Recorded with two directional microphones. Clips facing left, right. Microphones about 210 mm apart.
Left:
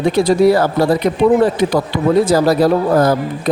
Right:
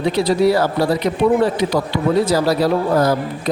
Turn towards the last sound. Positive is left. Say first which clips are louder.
# left 3 dB
turn(degrees=50)  # may be behind; listen again after turning